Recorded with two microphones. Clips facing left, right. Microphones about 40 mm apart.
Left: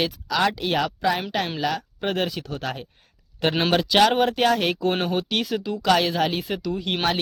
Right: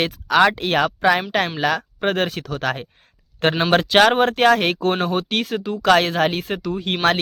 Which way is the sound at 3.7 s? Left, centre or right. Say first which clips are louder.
Right 4 dB; right.